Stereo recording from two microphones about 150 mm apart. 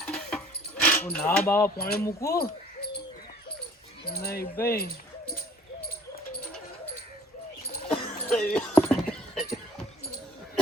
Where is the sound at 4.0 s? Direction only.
90° left.